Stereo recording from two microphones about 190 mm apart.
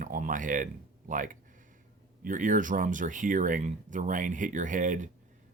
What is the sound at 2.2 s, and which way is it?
Speech, 45° right (ahead or behind).